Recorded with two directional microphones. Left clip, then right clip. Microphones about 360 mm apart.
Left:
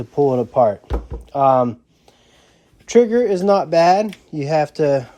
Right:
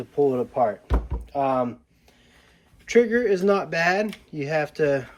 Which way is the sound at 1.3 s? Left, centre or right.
Centre.